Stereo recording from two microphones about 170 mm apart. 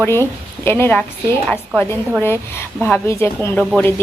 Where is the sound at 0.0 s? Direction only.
15° left (ahead or behind).